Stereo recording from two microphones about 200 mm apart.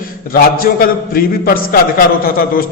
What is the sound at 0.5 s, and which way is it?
A man's voice, 45° left (ahead or behind).